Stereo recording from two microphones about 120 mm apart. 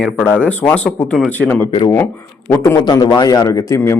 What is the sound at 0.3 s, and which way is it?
A man's voice, 10° left (ahead or behind).